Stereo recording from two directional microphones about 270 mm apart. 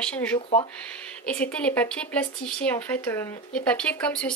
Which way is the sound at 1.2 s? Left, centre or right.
Centre.